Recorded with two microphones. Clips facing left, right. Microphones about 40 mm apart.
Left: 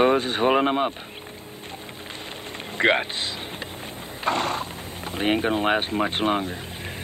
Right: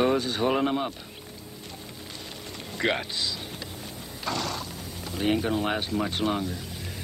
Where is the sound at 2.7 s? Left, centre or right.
Left.